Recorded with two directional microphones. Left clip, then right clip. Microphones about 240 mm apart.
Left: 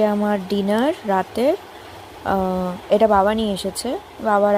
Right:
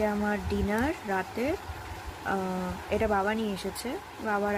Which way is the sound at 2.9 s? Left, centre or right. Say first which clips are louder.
Left 12 dB; left.